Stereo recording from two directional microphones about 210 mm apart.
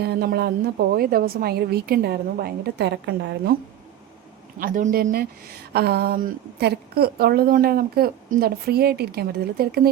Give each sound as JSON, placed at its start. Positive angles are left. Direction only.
{"t": 0.0, "sound": "speech", "side_deg": -50}
{"t": 4.6, "sound": "speech", "side_deg": -40}